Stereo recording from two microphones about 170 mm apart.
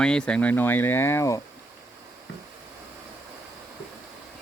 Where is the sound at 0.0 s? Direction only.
5° left (ahead or behind).